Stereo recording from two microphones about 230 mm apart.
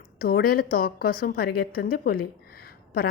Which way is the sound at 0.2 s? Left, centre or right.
Left.